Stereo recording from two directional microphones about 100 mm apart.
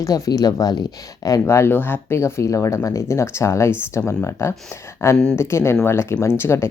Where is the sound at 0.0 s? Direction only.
35° left (ahead or behind).